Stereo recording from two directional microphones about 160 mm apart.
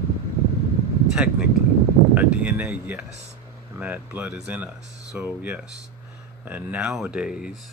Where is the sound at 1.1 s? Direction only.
5° right (ahead or behind).